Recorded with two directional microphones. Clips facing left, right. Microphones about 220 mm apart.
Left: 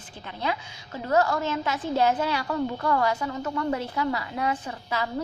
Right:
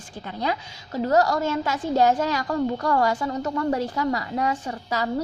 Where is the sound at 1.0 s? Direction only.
40° right (ahead or behind).